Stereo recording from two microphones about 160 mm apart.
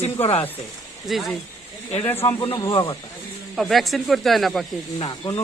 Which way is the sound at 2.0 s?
15° left (ahead or behind).